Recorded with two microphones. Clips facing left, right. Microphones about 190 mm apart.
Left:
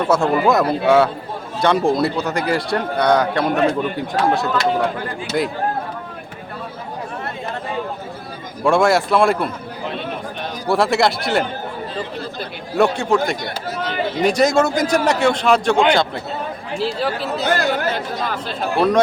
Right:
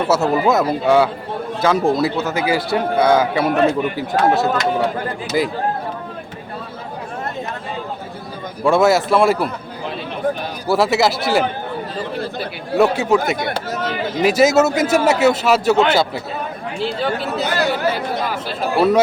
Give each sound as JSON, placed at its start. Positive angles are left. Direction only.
{"t": 0.1, "sound": "a man's voice", "side_deg": -5}
{"t": 8.6, "sound": "a man's voice", "side_deg": 0}
{"t": 10.7, "sound": "a man's voice", "side_deg": -5}
{"t": 13.3, "sound": "speech", "side_deg": -50}
{"t": 14.3, "sound": "a man's voice", "side_deg": -5}